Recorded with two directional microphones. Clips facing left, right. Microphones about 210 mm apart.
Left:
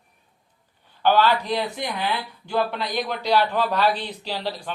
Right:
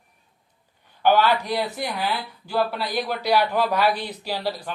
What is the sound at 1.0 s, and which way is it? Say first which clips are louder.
A man's voice: even; 15° right (ahead or behind).